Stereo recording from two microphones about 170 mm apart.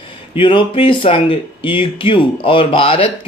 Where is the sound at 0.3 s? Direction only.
30° left (ahead or behind).